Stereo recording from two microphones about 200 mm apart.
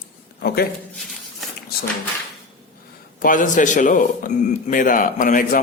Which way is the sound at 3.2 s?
40° left (ahead or behind).